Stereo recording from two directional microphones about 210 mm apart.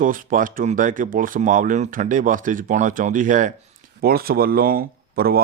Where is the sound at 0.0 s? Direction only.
40° right (ahead or behind).